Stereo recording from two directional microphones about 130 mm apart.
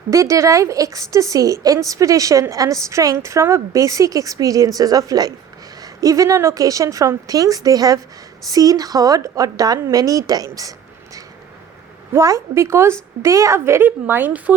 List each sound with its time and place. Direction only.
0.1 s a woman's voice: 25° right (ahead or behind)